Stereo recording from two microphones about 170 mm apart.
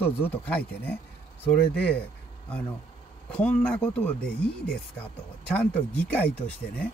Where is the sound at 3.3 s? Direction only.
10° left (ahead or behind).